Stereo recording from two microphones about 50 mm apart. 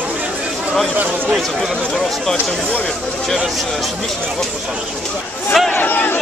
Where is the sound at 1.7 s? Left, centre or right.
Centre.